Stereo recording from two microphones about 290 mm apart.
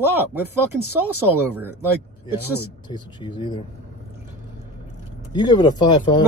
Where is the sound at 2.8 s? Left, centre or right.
Centre.